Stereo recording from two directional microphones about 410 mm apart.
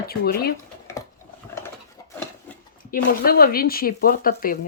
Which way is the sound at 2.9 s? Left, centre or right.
Left.